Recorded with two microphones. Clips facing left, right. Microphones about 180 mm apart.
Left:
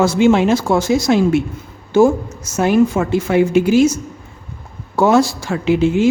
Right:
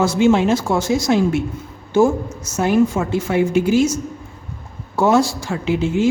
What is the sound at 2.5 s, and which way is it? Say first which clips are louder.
Speech: left 2 dB; 75° left (ahead or behind).